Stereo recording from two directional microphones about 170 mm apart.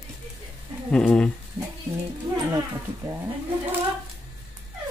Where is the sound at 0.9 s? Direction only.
5° left (ahead or behind).